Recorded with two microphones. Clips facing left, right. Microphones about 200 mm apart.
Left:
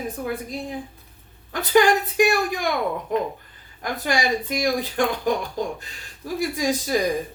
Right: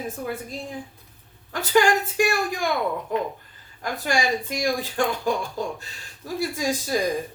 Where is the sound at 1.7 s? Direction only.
15° left (ahead or behind).